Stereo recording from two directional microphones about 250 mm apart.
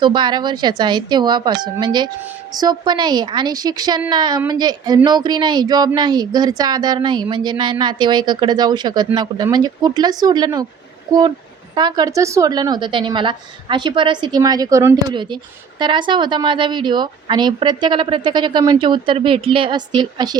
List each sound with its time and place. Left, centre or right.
0.0 s speech: centre
11.7 s a woman's voice: centre